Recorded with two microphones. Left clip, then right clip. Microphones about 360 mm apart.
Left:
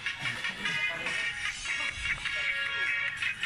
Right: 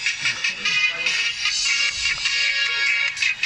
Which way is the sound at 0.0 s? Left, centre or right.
Right.